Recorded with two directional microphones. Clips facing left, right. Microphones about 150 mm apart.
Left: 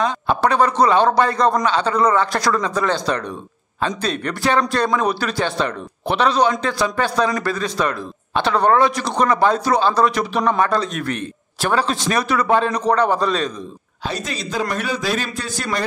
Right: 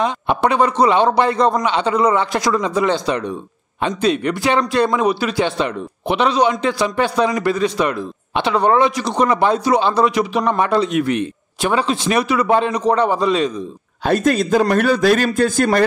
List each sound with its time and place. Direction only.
0.0 s speech: 25° right (ahead or behind)
4.0 s speech: 40° left (ahead or behind)
4.3 s speech: 20° right (ahead or behind)
4.8 s a man's voice: 5° right (ahead or behind)
10.0 s a man's voice: 10° right (ahead or behind)
10.6 s a man's voice: 25° right (ahead or behind)
14.0 s a man's voice: 50° right (ahead or behind)